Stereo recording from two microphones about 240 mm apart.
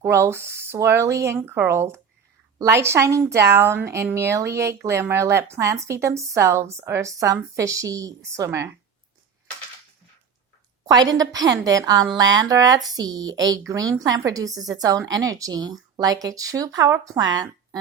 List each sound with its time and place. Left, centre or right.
0.0 s a woman's voice: centre
10.8 s a woman's voice: centre